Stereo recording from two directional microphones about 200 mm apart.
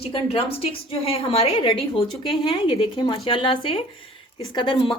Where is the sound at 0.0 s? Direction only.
30° left (ahead or behind).